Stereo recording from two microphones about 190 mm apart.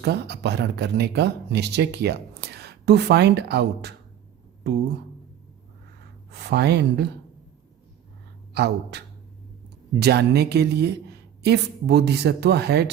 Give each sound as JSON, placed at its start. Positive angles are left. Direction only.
{"t": 0.0, "sound": "speech", "side_deg": -60}
{"t": 6.3, "sound": "speech", "side_deg": -60}
{"t": 8.5, "sound": "speech", "side_deg": -60}